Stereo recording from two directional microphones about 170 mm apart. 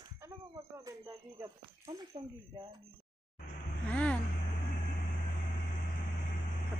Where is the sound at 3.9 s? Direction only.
10° left (ahead or behind).